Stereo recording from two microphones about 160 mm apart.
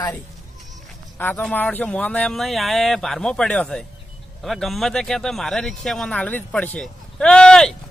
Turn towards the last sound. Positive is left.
turn(degrees=5)  # may be behind; listen again after turning